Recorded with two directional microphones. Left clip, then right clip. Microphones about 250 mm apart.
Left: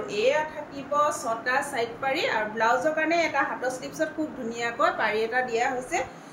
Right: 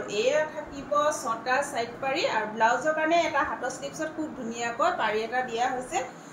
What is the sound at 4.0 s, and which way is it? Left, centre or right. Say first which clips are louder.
A woman's voice: left 5 dB; left.